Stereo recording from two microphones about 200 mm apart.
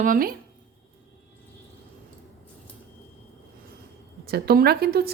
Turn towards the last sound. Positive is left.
turn(degrees=-50)  # may be behind; listen again after turning